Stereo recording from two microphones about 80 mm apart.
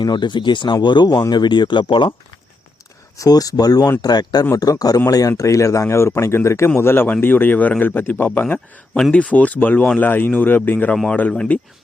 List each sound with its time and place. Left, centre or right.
0.0 s speech: left
3.2 s speech: left
10.9 s speech: centre
11.2 s speech: centre